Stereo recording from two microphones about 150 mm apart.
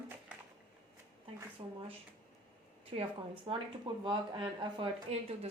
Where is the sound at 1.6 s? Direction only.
40° right (ahead or behind).